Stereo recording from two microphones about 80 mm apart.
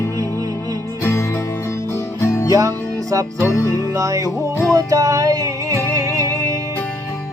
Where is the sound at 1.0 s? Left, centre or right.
Left.